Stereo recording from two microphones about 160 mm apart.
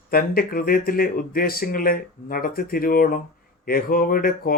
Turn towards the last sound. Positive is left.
turn(degrees=65)  # may be behind; listen again after turning